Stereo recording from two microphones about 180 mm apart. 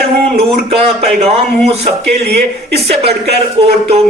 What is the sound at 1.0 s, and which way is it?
Speech, 35° right (ahead or behind).